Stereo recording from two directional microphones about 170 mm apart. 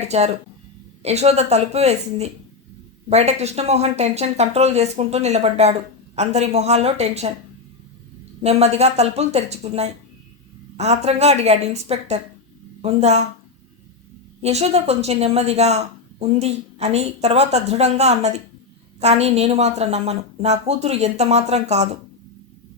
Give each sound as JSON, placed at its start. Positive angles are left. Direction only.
{"t": 0.0, "sound": "a woman's voice", "side_deg": -40}
{"t": 8.4, "sound": "a woman's voice", "side_deg": -35}
{"t": 14.4, "sound": "a woman's voice", "side_deg": -40}